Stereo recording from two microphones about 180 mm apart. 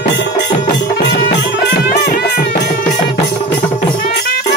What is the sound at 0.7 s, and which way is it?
Music, 65° left (ahead or behind).